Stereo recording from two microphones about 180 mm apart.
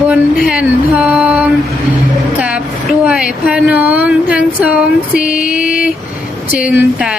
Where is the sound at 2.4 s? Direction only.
5° right (ahead or behind).